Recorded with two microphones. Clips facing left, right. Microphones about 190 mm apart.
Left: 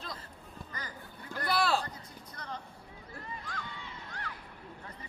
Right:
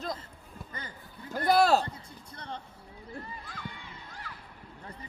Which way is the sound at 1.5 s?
40° right (ahead or behind).